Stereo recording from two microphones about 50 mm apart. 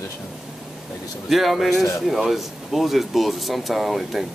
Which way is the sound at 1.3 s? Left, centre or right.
Centre.